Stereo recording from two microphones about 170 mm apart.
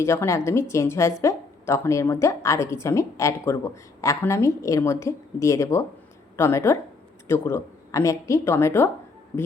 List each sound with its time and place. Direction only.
0.0 s a woman's voice: 15° left (ahead or behind)